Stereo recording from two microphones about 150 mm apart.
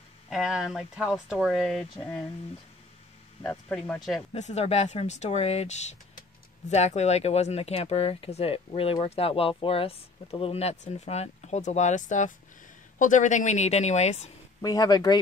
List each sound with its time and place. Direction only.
0.3 s speech: 5° right (ahead or behind)
3.4 s speech: 5° left (ahead or behind)
4.3 s speech: 50° left (ahead or behind)
14.6 s speech: 25° left (ahead or behind)